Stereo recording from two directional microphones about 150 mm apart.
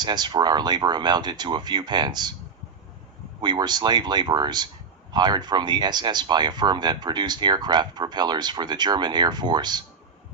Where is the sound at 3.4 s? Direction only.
30° right (ahead or behind).